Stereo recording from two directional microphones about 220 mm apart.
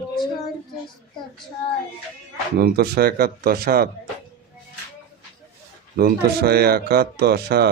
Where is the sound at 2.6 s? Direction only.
45° right (ahead or behind).